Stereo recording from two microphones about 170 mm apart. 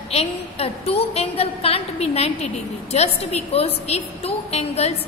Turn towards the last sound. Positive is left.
turn(degrees=35)  # may be behind; listen again after turning